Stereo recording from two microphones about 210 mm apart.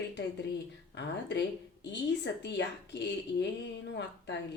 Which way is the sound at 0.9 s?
55° left (ahead or behind).